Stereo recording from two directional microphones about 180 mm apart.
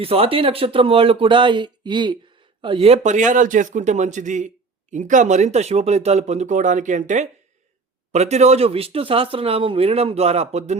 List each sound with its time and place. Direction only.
0.0 s a man's voice: 30° right (ahead or behind)